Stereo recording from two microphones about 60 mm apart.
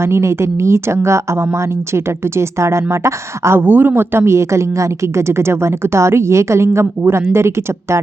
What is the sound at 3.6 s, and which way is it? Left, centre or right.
Speech, right.